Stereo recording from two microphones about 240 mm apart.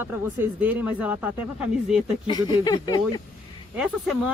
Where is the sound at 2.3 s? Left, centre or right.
Centre.